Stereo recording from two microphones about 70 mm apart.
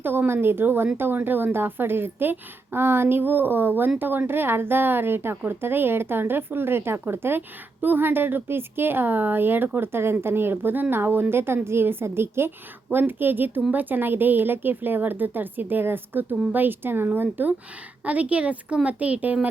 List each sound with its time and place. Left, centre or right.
0.0 s a woman's voice: right